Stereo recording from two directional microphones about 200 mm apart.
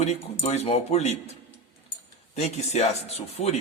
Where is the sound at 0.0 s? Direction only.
35° left (ahead or behind).